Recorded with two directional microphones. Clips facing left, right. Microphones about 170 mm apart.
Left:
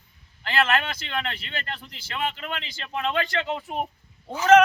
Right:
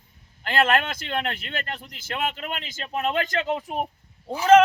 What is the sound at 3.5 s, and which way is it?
Speech, 15° right (ahead or behind).